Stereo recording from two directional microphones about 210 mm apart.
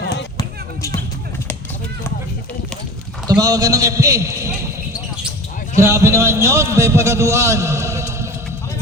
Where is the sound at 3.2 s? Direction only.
15° right (ahead or behind).